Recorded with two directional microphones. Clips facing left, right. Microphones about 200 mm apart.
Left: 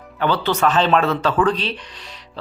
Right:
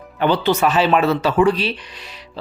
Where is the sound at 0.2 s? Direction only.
15° right (ahead or behind).